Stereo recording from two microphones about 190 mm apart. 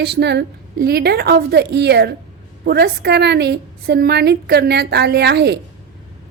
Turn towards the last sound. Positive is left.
turn(degrees=-60)  # may be behind; listen again after turning